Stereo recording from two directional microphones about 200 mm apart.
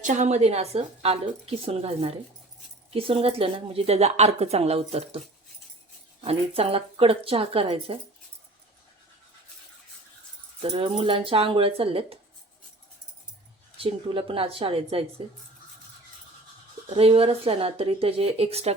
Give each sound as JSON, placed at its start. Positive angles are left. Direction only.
{"t": 0.0, "sound": "a woman's voice", "side_deg": -35}
{"t": 6.2, "sound": "speech", "side_deg": -30}
{"t": 10.6, "sound": "speech", "side_deg": -25}
{"t": 13.7, "sound": "speech", "side_deg": -25}
{"t": 16.9, "sound": "speech", "side_deg": -30}